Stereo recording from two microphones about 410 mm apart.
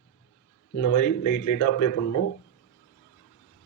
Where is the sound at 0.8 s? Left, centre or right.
Left.